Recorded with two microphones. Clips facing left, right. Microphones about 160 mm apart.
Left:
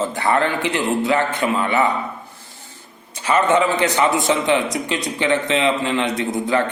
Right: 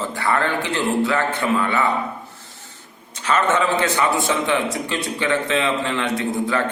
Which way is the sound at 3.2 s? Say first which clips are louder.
Left 3 dB; 10° left (ahead or behind).